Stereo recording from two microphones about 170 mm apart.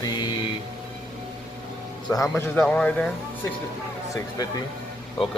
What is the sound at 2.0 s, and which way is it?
Speech, 20° left (ahead or behind).